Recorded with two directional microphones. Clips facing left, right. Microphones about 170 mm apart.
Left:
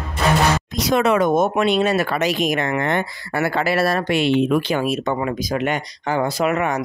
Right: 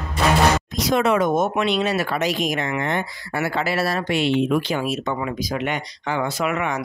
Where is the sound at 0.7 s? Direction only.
65° left (ahead or behind).